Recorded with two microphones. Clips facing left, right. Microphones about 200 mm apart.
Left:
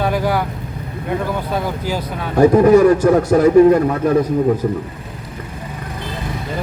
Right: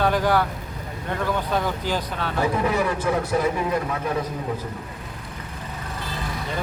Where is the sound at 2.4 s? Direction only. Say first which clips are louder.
Left 14 dB; 45° left (ahead or behind).